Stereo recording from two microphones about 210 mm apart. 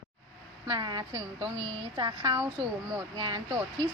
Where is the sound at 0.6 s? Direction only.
20° right (ahead or behind).